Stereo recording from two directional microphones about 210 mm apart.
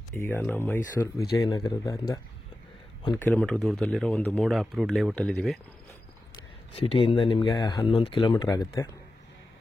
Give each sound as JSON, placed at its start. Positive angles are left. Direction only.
{"t": 0.1, "sound": "speech", "side_deg": 10}
{"t": 3.2, "sound": "speech", "side_deg": 10}
{"t": 6.7, "sound": "speech", "side_deg": 30}